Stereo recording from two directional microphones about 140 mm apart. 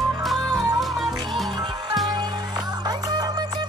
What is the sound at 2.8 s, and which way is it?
Music, 30° right (ahead or behind).